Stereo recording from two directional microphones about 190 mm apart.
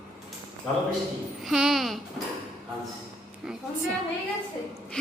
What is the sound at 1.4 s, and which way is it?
Speech, centre (ahead or behind).